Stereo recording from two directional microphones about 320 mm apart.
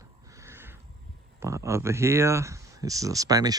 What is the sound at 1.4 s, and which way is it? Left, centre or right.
Speech, centre.